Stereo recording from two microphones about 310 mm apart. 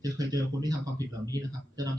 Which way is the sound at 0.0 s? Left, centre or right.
Centre.